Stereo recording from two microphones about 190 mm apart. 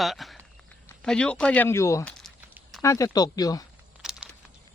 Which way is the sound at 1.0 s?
5° left (ahead or behind).